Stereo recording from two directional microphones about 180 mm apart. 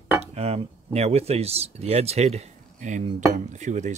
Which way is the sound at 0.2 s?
35° right (ahead or behind).